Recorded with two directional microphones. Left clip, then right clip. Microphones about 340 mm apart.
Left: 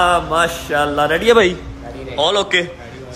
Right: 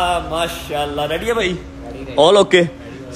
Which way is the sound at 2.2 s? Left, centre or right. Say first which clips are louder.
Right 5 dB; centre.